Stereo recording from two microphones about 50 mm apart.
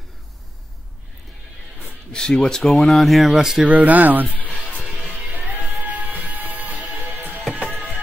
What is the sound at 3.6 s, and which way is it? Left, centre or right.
Speech, right.